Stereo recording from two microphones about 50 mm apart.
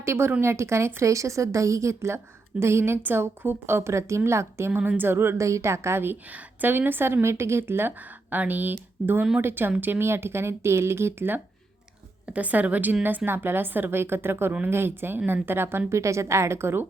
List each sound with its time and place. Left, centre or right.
0.0 s a woman's voice: right
1.0 s a woman's voice: right
3.2 s speech: right
4.9 s a woman's voice: right
5.4 s a woman's voice: right
6.3 s a woman's voice: right
8.3 s a woman's voice: right
12.3 s a woman's voice: right
15.9 s a woman's voice: right